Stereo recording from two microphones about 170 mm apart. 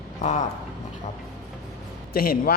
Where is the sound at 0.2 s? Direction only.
45° left (ahead or behind).